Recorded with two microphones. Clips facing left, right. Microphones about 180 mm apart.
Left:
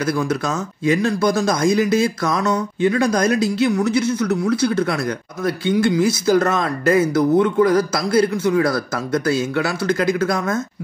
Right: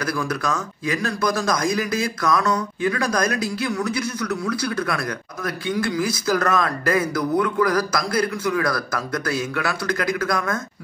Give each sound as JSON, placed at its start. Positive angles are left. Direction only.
{"t": 0.0, "sound": "speech", "side_deg": 25}